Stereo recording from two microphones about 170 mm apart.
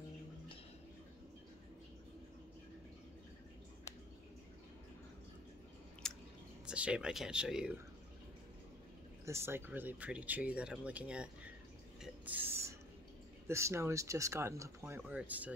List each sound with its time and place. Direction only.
6.0 s chewing: 5° left (ahead or behind)
6.6 s speech: 5° right (ahead or behind)
9.2 s speech: 15° right (ahead or behind)
12.0 s mechanisms: 10° right (ahead or behind)
13.5 s speech: 15° right (ahead or behind)